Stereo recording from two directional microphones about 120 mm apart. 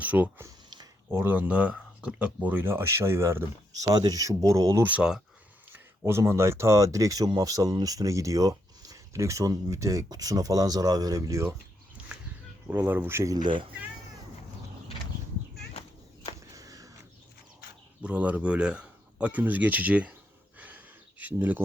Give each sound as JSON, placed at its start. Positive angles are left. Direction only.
{"t": 0.0, "sound": "speech", "side_deg": -15}
{"t": 0.4, "sound": "a sound", "side_deg": -35}
{"t": 1.1, "sound": "speech", "side_deg": -20}
{"t": 4.9, "sound": "speech", "side_deg": -10}
{"t": 5.7, "sound": "speech", "side_deg": -20}
{"t": 12.6, "sound": "speech", "side_deg": -15}
{"t": 13.3, "sound": "speech", "side_deg": -40}
{"t": 16.6, "sound": "a sound", "side_deg": -30}
{"t": 18.0, "sound": "speech", "side_deg": -10}
{"t": 20.6, "sound": "a sound", "side_deg": -15}